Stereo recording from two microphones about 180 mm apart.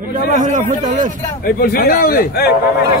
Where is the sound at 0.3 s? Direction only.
45° right (ahead or behind).